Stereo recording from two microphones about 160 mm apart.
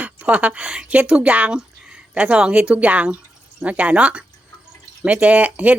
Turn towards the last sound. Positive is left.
turn(degrees=-10)  # may be behind; listen again after turning